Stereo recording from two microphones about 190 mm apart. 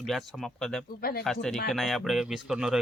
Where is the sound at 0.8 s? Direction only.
50° left (ahead or behind).